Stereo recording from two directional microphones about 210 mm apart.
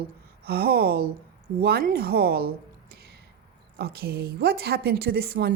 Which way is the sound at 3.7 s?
50° right (ahead or behind).